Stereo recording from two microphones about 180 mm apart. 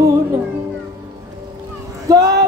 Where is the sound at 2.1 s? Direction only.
20° right (ahead or behind).